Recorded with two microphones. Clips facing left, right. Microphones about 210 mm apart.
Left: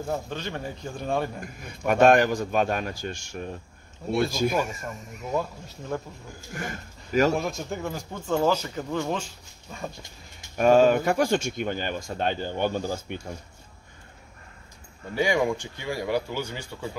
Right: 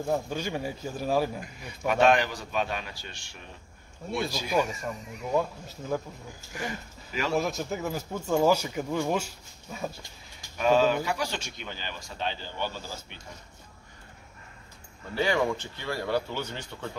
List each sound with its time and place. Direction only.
0.1 s a man's voice: 10° right (ahead or behind)
1.4 s speech: 50° left (ahead or behind)
4.6 s a man's voice: centre (ahead or behind)
6.5 s speech: 50° left (ahead or behind)
7.3 s speech: centre (ahead or behind)
10.6 s speech: 50° left (ahead or behind)
15.1 s speech: 15° left (ahead or behind)